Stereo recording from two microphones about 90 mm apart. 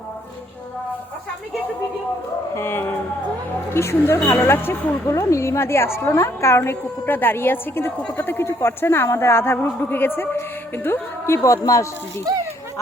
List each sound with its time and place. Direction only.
2.6 s speech: 25° left (ahead or behind)
11.4 s speech: 35° left (ahead or behind)
12.3 s speech: 50° right (ahead or behind)